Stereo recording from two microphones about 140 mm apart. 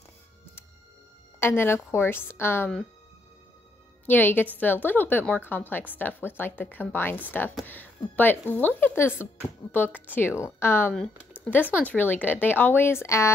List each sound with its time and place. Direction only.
1.4 s a woman's voice: 15° left (ahead or behind)
4.0 s a woman's voice: 15° left (ahead or behind)